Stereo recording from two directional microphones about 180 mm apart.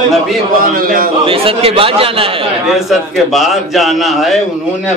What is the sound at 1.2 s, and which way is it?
Speech, 30° right (ahead or behind).